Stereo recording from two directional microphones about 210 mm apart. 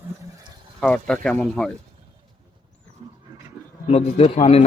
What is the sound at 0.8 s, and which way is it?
Speech, 5° left (ahead or behind).